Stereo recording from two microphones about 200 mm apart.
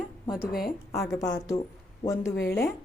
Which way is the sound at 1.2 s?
20° left (ahead or behind).